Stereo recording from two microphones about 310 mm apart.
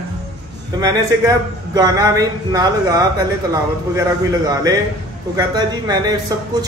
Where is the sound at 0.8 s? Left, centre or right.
Centre.